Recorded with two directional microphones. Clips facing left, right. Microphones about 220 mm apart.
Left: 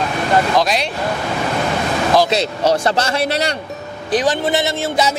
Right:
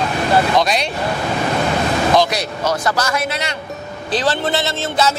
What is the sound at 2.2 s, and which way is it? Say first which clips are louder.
A man's voice: left 4 dB; 25° left (ahead or behind).